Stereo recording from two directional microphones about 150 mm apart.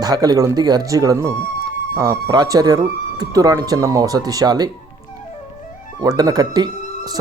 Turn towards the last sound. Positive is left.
turn(degrees=-25)  # may be behind; listen again after turning